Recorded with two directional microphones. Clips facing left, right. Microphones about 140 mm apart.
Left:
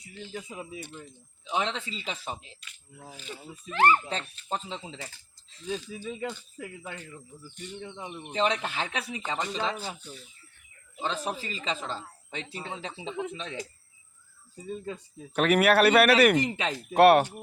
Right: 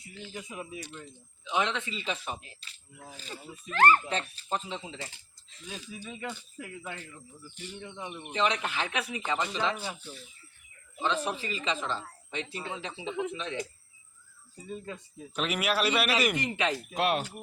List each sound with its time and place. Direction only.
1.5 s speech: 30° left (ahead or behind)
3.7 s speech: 20° left (ahead or behind)
4.4 s speech: 30° left (ahead or behind)
4.9 s speech: 25° right (ahead or behind)
6.1 s speech: 30° left (ahead or behind)
7.9 s speech: 30° left (ahead or behind)
11.0 s speech: 40° left (ahead or behind)
15.4 s a man's voice: 60° left (ahead or behind)
16.3 s speech: 35° left (ahead or behind)
16.9 s a man's voice: 65° left (ahead or behind)